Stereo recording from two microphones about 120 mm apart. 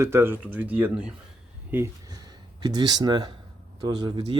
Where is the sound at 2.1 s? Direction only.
35° right (ahead or behind).